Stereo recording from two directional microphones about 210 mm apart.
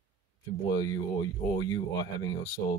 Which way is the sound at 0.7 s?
15° left (ahead or behind).